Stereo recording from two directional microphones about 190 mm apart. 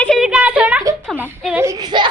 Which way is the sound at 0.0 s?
Centre (ahead or behind).